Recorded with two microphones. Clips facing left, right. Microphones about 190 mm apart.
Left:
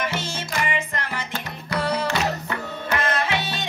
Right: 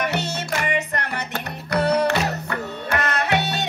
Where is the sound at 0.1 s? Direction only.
65° right (ahead or behind).